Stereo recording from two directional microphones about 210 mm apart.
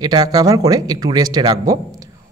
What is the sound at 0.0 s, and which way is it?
A woman's voice, 20° right (ahead or behind).